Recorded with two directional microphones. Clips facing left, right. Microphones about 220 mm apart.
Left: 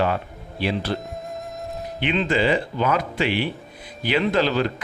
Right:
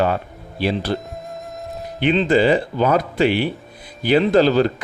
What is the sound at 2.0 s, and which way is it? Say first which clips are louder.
Speech: right 6 dB; 35° right (ahead or behind).